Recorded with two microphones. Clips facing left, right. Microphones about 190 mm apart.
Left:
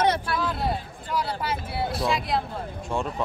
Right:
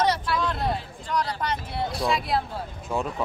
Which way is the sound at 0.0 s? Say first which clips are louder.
Left 1 dB; 55° left (ahead or behind).